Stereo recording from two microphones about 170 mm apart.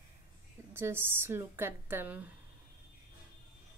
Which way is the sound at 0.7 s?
15° right (ahead or behind).